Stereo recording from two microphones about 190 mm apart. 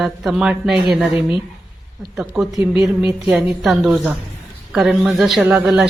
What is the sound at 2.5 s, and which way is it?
Speech, 15° right (ahead or behind).